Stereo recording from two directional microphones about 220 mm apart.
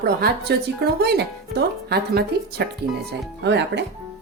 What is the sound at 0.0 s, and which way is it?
Speech, 45° right (ahead or behind).